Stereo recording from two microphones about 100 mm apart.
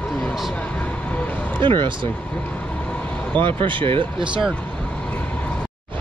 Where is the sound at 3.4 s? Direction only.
55° right (ahead or behind).